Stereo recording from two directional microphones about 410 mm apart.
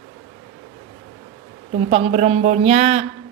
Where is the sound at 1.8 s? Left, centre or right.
Centre.